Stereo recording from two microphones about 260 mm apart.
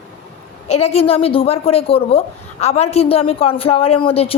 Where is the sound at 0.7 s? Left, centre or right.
Left.